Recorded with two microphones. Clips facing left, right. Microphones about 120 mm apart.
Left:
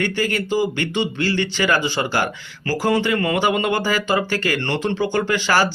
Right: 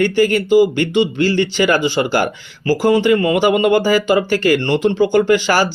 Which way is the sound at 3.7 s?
40° right (ahead or behind).